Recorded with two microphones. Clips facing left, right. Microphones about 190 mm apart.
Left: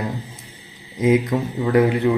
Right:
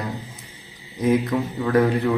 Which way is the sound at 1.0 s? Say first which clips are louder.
Left 2 dB; 20° left (ahead or behind).